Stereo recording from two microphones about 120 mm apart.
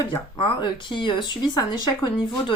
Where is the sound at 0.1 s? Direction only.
40° left (ahead or behind).